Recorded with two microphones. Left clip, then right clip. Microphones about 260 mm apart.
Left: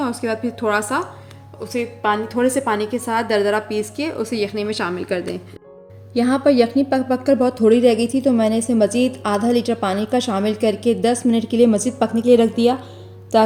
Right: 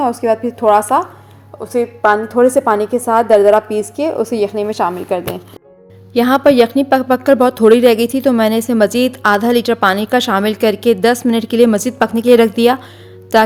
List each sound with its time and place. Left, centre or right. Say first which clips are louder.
0.0 s a woman's voice: right 8 dB; centre
6.1 s a woman's voice: right 6 dB; right